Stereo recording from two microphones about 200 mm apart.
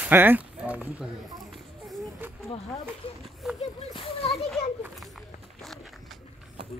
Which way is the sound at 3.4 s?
Centre (ahead or behind).